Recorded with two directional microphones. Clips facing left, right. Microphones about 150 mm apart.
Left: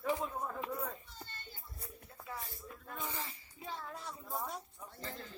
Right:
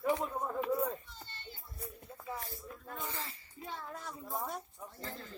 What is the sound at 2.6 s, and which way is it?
Snake, centre (ahead or behind).